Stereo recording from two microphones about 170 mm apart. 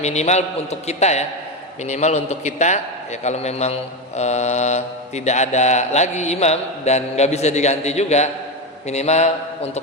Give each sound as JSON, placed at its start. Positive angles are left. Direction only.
{"t": 0.0, "sound": "mantra", "side_deg": 40}